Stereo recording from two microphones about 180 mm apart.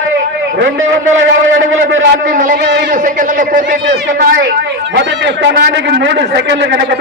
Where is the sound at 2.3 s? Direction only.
50° right (ahead or behind).